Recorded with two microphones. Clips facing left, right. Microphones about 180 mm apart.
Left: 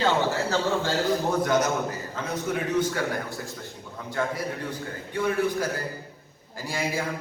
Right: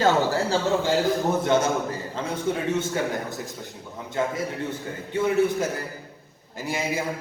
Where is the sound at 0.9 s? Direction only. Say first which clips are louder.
Right 2 dB; 25° right (ahead or behind).